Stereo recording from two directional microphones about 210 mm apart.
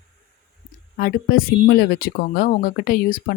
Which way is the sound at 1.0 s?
45° left (ahead or behind).